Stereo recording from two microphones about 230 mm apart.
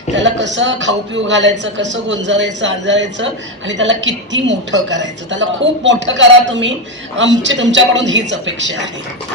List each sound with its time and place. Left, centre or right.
0.2 s a woman's voice: right